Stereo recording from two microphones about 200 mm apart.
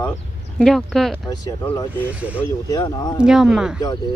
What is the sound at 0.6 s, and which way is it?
Speech, centre (ahead or behind).